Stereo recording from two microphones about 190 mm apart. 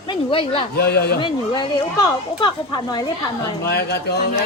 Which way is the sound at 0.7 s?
55° left (ahead or behind).